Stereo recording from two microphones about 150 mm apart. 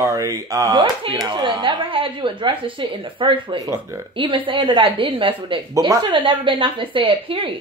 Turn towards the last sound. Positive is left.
turn(degrees=-35)  # may be behind; listen again after turning